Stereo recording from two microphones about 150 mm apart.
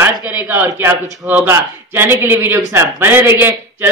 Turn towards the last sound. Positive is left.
turn(degrees=-15)  # may be behind; listen again after turning